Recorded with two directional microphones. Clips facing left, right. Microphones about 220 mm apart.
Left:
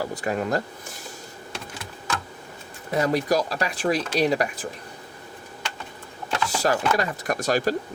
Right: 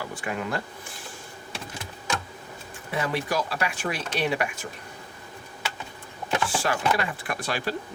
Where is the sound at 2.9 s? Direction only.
40° left (ahead or behind).